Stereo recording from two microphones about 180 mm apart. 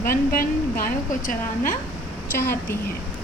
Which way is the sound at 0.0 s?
55° left (ahead or behind).